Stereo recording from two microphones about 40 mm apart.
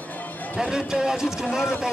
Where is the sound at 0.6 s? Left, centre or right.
Centre.